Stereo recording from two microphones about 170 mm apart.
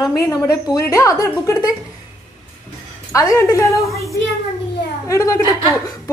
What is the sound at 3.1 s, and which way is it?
Speech, 20° left (ahead or behind).